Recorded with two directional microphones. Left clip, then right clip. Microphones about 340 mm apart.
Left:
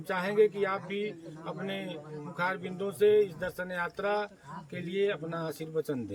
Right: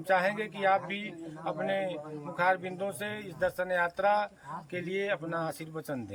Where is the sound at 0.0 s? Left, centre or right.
Centre.